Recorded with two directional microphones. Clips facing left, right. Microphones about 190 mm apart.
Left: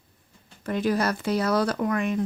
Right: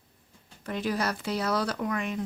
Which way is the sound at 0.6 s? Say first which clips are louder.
Left 5 dB; 50° left (ahead or behind).